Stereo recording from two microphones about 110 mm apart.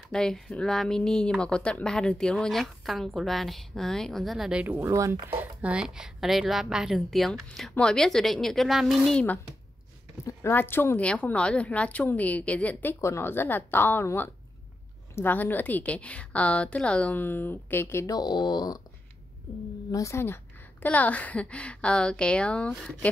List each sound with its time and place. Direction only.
0.1 s a woman's voice: 5° left (ahead or behind); by 4.9 s 15° right (ahead or behind)
4.9 s a woman's voice: 30° right (ahead or behind); by 9.2 s centre (ahead or behind)
10.2 s a woman's voice: 20° left (ahead or behind)
13.0 s a woman's voice: 25° left (ahead or behind)
18.1 s speech: 40° left (ahead or behind)
19.9 s speech: 30° left (ahead or behind)
20.8 s a woman's voice: 15° left (ahead or behind)